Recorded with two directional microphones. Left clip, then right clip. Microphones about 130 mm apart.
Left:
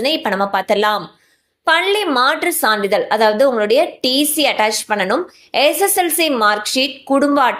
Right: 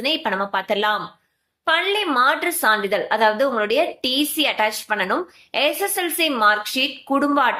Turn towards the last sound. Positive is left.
turn(degrees=45)  # may be behind; listen again after turning